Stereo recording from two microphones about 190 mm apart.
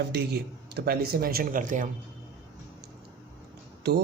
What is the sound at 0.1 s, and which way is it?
Speech, 60° right (ahead or behind).